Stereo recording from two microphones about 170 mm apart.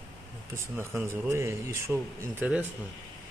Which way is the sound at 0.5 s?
15° right (ahead or behind).